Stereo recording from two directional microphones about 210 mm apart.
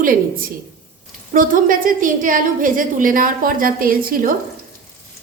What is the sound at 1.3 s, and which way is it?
A woman's voice, 40° right (ahead or behind).